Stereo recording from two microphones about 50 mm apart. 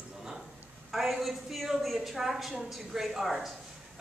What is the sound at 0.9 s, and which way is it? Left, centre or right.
A woman's voice, centre.